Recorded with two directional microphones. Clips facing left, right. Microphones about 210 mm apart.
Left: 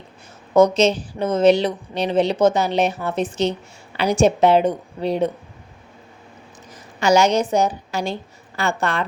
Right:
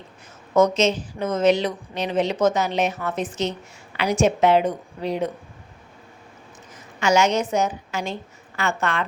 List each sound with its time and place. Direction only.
0.5 s a woman's voice: 30° left (ahead or behind)
7.0 s a woman's voice: 35° left (ahead or behind)